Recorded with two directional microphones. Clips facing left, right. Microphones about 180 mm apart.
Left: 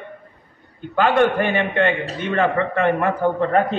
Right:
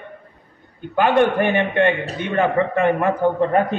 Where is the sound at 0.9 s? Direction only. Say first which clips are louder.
Right 1 dB; 15° right (ahead or behind).